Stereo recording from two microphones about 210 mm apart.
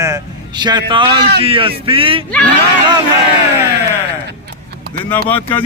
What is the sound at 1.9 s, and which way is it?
Speech, 25° right (ahead or behind).